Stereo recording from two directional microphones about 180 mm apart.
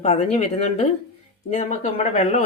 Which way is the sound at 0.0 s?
40° left (ahead or behind).